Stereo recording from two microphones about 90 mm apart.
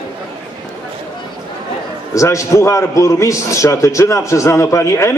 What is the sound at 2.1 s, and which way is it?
A man's voice, 35° left (ahead or behind).